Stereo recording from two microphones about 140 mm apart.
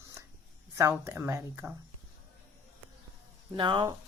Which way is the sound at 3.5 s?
35° right (ahead or behind).